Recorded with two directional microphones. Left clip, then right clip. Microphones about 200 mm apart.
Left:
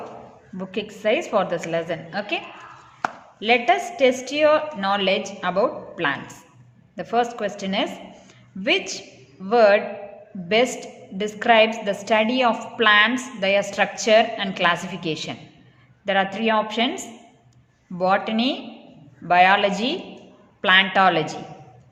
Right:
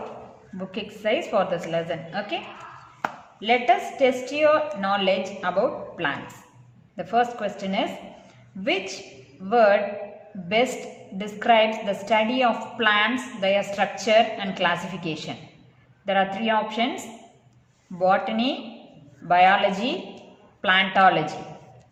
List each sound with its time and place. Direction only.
0.6 s a woman's voice: 30° left (ahead or behind)
3.4 s a woman's voice: 35° left (ahead or behind)
11.2 s a woman's voice: 35° left (ahead or behind)